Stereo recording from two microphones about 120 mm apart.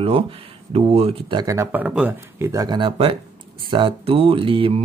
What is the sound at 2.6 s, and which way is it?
Speech, 40° right (ahead or behind).